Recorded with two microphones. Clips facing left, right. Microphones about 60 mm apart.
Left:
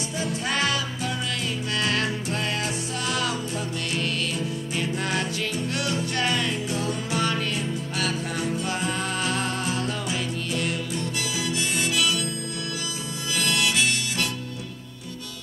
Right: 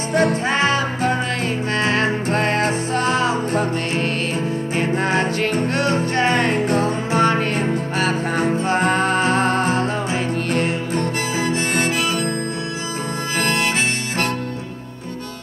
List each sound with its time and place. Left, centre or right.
0.1 s music: right
0.5 s music: right
13.4 s harmonica: right